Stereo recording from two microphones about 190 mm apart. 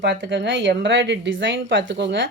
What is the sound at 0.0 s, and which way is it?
A woman's voice, 70° right (ahead or behind).